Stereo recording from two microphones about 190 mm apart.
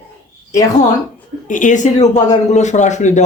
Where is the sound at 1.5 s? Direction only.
40° left (ahead or behind).